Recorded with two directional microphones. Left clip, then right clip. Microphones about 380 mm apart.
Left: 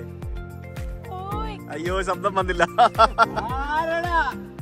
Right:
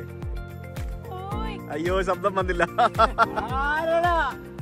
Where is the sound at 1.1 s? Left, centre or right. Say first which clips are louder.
Left 2 dB; centre.